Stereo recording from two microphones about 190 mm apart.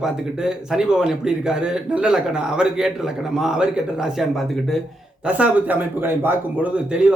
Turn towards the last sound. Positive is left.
turn(degrees=-5)  # may be behind; listen again after turning